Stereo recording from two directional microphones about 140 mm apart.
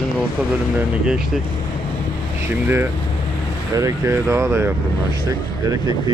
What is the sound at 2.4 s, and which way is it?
Speech, 15° right (ahead or behind).